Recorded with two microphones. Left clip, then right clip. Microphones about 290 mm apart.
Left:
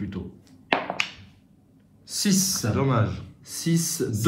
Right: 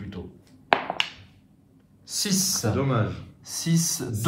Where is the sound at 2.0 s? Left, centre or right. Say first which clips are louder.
Left 1 dB; centre.